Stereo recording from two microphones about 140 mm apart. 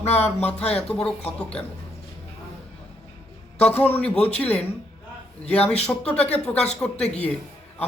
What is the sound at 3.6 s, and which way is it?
Speech, 10° left (ahead or behind).